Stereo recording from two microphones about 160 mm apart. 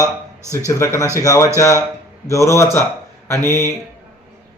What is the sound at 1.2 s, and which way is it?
A man's voice, 20° left (ahead or behind).